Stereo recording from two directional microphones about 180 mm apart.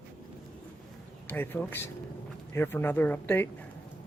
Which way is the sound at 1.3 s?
10° left (ahead or behind).